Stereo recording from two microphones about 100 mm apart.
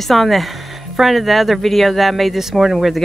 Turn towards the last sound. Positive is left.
turn(degrees=0)  # may be behind; listen again after turning